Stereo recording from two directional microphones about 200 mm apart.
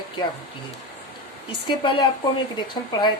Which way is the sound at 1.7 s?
25° left (ahead or behind).